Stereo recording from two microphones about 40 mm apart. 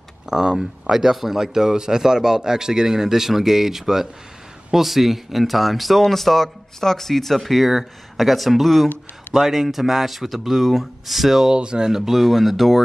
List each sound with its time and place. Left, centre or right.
0.3 s speech: centre
11.5 s speech: right
11.9 s speech: centre